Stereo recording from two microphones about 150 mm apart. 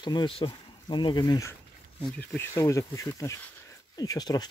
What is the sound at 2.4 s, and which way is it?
Speech, 20° left (ahead or behind).